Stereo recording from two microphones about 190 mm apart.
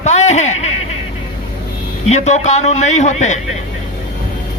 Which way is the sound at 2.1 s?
35° left (ahead or behind).